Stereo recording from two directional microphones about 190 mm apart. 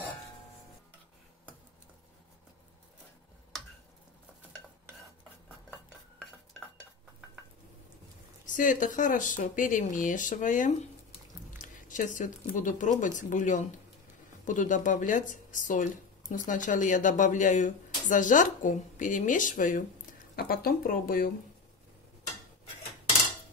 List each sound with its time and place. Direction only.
8.5 s speech: 45° left (ahead or behind)